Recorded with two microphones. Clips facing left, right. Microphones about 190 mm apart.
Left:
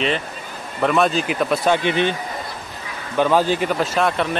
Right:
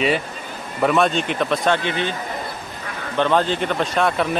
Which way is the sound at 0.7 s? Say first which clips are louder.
Even; centre (ahead or behind).